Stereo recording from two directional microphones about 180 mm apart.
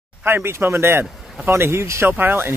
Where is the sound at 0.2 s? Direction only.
10° right (ahead or behind).